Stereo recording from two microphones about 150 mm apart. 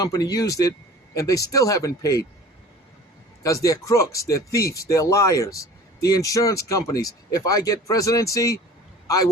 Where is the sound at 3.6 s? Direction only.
20° left (ahead or behind).